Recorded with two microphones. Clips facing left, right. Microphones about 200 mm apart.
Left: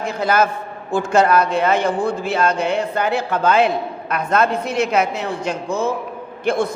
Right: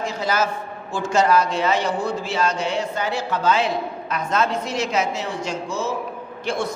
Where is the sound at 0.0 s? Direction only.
55° left (ahead or behind).